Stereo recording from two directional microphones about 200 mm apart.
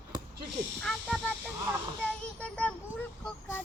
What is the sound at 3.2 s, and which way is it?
Vehicle, 10° left (ahead or behind).